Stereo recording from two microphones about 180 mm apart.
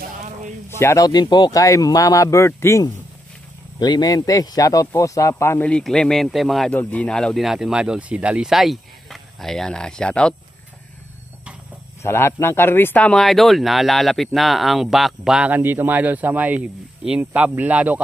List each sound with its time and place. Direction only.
0.7 s speech: 15° left (ahead or behind)
12.0 s speech: 15° left (ahead or behind); by 18.0 s 10° right (ahead or behind)